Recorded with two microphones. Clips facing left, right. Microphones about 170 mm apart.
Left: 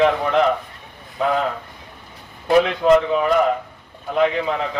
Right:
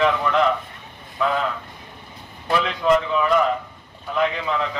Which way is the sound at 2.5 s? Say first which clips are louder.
Left 5 dB; 45° left (ahead or behind).